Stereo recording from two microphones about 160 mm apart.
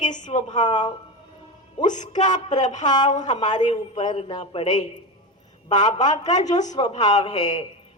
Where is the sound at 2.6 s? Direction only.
50° left (ahead or behind).